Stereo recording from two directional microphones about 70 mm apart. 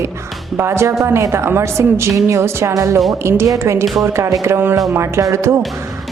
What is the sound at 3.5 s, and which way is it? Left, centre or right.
Speech, right.